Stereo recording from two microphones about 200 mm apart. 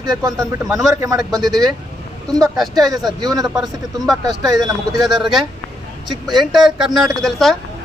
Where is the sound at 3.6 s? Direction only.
Centre (ahead or behind).